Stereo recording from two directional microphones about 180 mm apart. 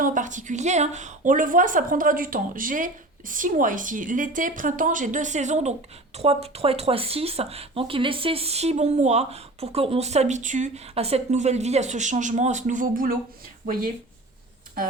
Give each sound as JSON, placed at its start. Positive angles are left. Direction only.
{"t": 0.0, "sound": "speech", "side_deg": -45}